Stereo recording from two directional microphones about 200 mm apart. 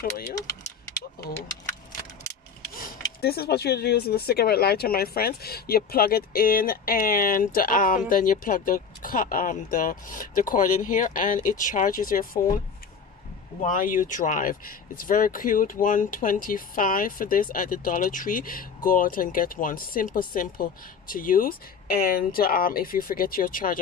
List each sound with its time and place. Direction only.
3.2 s speech: 50° left (ahead or behind)
13.6 s speech: 40° left (ahead or behind)